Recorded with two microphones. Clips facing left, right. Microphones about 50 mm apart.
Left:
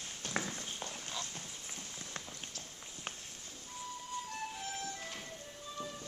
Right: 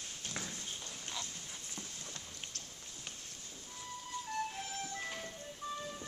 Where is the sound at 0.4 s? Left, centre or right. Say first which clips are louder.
Left 5 dB; left.